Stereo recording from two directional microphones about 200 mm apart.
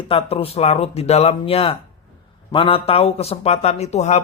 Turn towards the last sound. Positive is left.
turn(degrees=35)  # may be behind; listen again after turning